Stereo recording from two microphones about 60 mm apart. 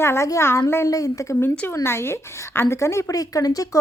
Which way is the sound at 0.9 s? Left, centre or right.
Left.